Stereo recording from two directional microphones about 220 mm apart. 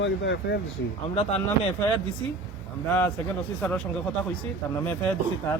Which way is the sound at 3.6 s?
5° left (ahead or behind).